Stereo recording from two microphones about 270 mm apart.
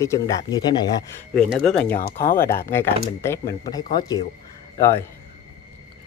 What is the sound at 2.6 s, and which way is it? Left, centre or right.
Speech, centre.